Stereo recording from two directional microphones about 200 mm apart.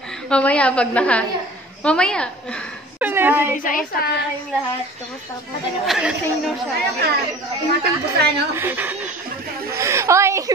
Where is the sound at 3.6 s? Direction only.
45° left (ahead or behind).